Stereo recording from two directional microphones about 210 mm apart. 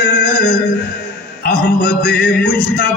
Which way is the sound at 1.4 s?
45° left (ahead or behind).